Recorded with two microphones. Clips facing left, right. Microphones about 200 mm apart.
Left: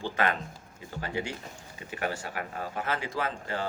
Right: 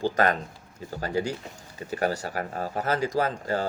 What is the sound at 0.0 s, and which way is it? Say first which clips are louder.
A man's voice: right 5 dB; 40° right (ahead or behind).